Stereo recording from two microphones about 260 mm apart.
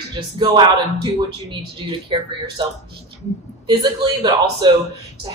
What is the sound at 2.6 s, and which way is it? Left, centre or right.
A man's voice, centre.